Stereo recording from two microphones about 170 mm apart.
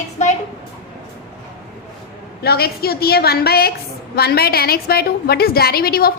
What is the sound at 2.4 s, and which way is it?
A woman's voice, 65° left (ahead or behind).